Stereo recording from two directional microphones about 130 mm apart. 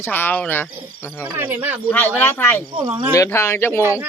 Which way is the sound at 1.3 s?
15° right (ahead or behind).